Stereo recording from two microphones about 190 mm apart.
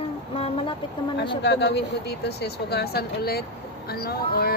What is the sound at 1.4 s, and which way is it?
Speech, 65° left (ahead or behind).